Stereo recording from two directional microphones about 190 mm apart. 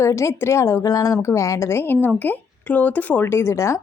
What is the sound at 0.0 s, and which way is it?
Speech, 15° left (ahead or behind).